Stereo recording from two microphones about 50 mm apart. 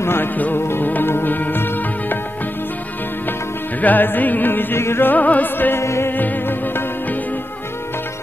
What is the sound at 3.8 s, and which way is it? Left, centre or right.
Music, left.